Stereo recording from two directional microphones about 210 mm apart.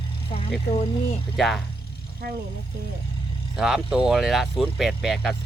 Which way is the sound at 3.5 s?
Centre (ahead or behind).